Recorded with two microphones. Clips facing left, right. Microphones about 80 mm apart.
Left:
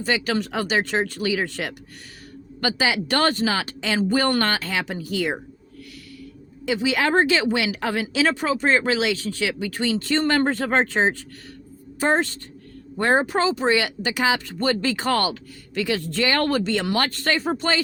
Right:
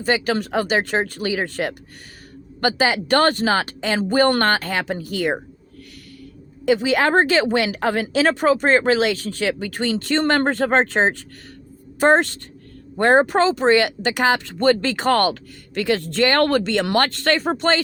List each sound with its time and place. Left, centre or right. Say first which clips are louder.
0.0 s speech: right 3 dB; right
6.7 s speech: right 4 dB; right
11.9 s speech: right 5 dB; right